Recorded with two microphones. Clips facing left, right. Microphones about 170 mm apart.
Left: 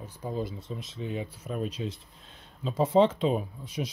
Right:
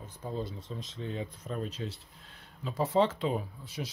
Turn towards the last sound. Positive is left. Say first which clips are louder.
# left 5 dB
turn(degrees=20)  # may be behind; listen again after turning